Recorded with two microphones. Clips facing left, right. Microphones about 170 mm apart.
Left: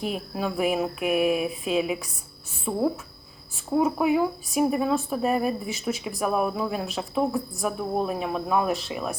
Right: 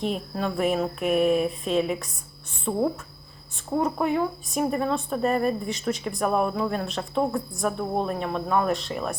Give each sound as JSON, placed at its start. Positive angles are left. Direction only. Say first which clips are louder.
{"t": 0.0, "sound": "speech", "louder": "right 1 dB", "side_deg": 5}